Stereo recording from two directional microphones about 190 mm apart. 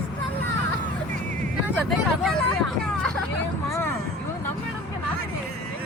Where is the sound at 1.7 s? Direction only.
5° right (ahead or behind).